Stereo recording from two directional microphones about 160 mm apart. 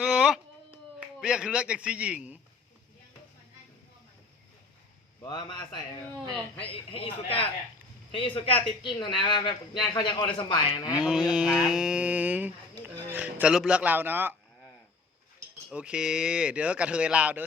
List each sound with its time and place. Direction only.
0.0 s a sound: 5° right (ahead or behind)
1.2 s speech: 5° right (ahead or behind)
5.2 s a man's voice: 30° left (ahead or behind)
11.0 s mantra: 5° right (ahead or behind)
13.1 s speech: 10° right (ahead or behind)
15.7 s speech: 5° right (ahead or behind)